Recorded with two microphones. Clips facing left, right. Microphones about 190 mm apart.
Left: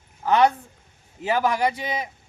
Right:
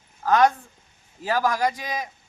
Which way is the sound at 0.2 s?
10° left (ahead or behind).